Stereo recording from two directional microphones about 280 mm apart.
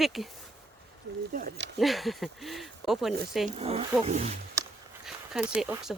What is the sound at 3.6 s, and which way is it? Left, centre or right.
Speech, right.